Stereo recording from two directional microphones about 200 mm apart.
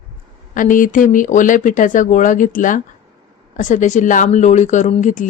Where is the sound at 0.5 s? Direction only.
40° left (ahead or behind).